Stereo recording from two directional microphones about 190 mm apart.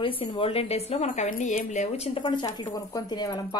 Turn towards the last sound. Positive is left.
turn(degrees=20)  # may be behind; listen again after turning